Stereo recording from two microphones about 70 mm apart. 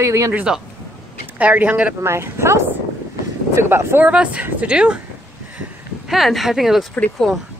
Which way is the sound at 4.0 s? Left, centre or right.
Centre.